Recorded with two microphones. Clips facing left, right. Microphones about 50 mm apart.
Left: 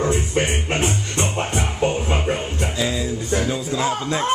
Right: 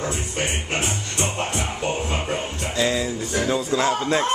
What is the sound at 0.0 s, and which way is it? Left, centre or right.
Music, left.